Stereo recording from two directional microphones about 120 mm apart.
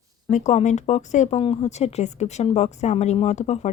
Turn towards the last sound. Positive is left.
turn(degrees=70)  # may be behind; listen again after turning